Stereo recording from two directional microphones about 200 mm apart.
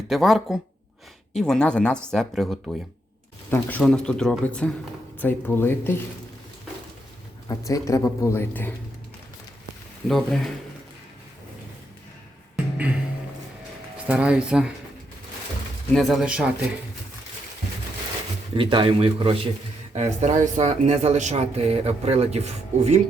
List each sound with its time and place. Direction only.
0.1 s a man's voice: centre (ahead or behind)
7.4 s a man's voice: 15° left (ahead or behind)
10.1 s speech: centre (ahead or behind)
12.7 s music: 5° right (ahead or behind)
14.1 s speech: 5° right (ahead or behind)
15.9 s speech: centre (ahead or behind)
18.5 s speech: 25° right (ahead or behind)